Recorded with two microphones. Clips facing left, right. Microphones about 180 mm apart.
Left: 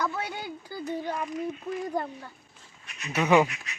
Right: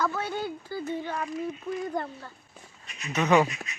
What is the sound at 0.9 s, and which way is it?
Speech, 15° left (ahead or behind).